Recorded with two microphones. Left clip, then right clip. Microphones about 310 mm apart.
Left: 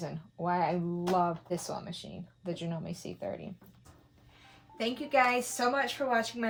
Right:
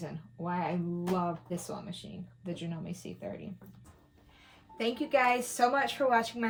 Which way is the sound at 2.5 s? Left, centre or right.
Left.